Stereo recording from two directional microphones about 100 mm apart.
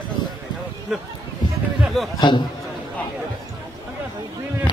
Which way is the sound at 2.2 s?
50° left (ahead or behind).